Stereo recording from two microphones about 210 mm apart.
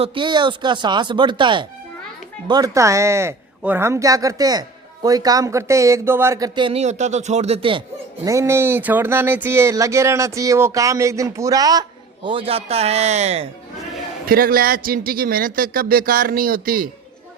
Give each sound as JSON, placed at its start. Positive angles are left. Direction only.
{"t": 0.0, "sound": "speech", "side_deg": -25}
{"t": 8.2, "sound": "speech", "side_deg": -15}
{"t": 14.3, "sound": "a man's voice", "side_deg": -45}